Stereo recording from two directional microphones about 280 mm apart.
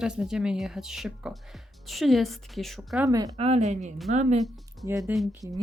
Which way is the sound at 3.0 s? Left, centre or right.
Centre.